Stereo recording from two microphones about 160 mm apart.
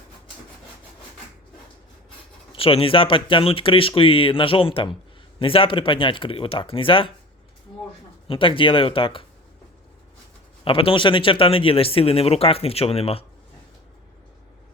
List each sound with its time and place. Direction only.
2.5 s speech: 35° left (ahead or behind)
8.3 s speech: 35° left (ahead or behind)
10.6 s speech: 35° left (ahead or behind)